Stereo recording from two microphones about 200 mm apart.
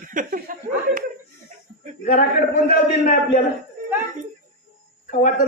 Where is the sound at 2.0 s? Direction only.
40° left (ahead or behind).